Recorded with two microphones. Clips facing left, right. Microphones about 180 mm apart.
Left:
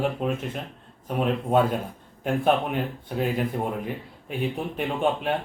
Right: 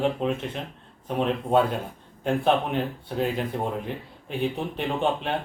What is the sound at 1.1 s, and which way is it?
Speech, 10° left (ahead or behind).